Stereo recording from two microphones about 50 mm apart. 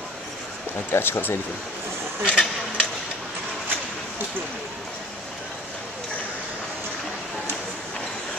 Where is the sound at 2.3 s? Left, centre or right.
Centre.